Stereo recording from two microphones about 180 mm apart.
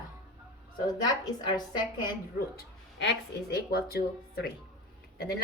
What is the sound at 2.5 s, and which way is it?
A woman's voice, 65° left (ahead or behind).